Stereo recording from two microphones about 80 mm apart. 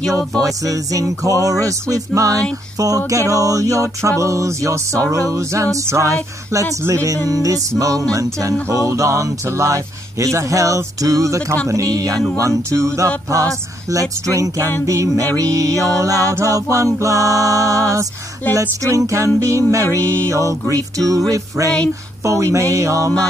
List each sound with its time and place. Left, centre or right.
0.4 s music: right